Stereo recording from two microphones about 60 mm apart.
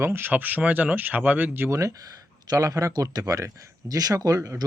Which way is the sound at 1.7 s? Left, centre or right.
Right.